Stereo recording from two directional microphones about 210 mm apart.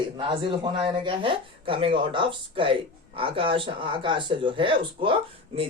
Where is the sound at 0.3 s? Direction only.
25° right (ahead or behind).